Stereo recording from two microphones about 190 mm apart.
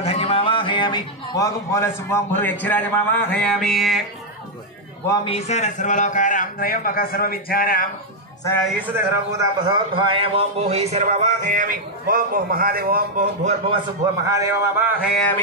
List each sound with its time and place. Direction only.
0.0 s a man's voice: 30° left (ahead or behind); by 4.0 s centre (ahead or behind)
5.0 s a man's voice: 20° left (ahead or behind)
5.3 s a man's voice: 40° left (ahead or behind)
8.6 s speech: 5° right (ahead or behind)
9.4 s a man's voice: 25° right (ahead or behind)
14.2 s speech: 15° right (ahead or behind)